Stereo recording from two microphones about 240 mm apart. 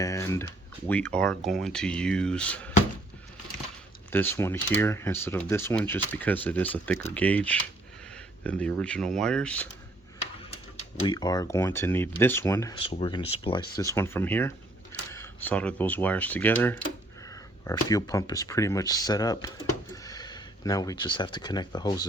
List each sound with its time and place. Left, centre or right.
0.0 s speech: centre
4.1 s speech: centre
11.0 s speech: centre